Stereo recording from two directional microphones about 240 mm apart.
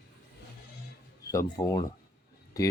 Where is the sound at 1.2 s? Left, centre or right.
Centre.